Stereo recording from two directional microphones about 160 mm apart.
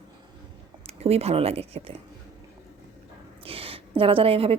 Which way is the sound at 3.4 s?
35° right (ahead or behind).